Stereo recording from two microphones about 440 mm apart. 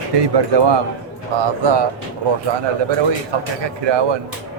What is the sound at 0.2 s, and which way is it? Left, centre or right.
Speech, right.